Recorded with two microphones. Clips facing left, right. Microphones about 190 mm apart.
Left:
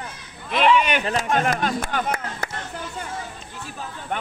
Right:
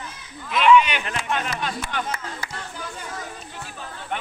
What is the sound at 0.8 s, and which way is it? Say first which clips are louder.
Speech: left 5 dB; 50° left (ahead or behind).